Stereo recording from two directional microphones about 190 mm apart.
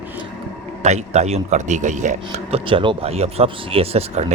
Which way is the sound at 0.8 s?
35° right (ahead or behind).